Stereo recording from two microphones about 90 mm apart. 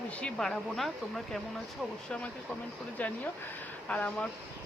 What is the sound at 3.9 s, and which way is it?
Speech, 15° left (ahead or behind).